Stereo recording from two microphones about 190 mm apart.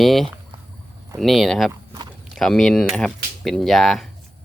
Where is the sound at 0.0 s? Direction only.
Centre (ahead or behind).